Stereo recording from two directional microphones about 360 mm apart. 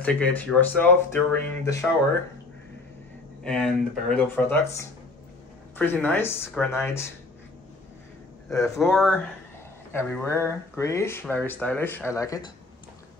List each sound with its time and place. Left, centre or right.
0.0 s speech: centre
3.4 s speech: centre
8.5 s speech: centre